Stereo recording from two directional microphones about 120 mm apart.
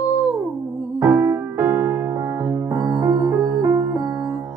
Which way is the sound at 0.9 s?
10° right (ahead or behind).